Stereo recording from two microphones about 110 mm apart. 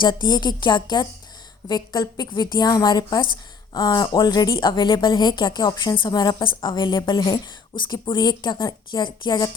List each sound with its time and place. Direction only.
0.0 s a woman's voice: 45° left (ahead or behind)